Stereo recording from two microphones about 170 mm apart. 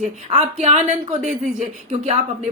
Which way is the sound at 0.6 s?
40° right (ahead or behind).